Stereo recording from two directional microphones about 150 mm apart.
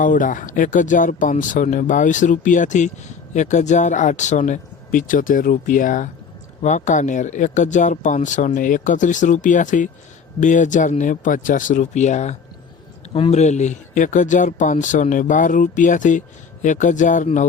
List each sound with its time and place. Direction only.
0.0 s speech: 60° left (ahead or behind)